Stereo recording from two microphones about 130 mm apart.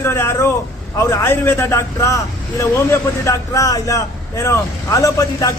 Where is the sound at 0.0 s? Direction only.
20° left (ahead or behind).